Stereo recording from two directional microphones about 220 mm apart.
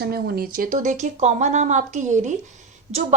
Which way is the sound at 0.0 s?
45° right (ahead or behind).